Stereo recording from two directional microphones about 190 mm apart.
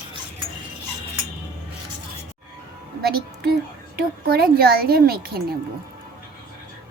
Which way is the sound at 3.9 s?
55° right (ahead or behind).